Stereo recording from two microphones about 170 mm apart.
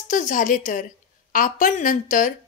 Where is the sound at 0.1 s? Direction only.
50° left (ahead or behind).